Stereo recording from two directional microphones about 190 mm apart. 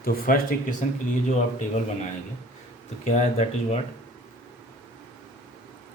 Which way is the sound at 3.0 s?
35° left (ahead or behind).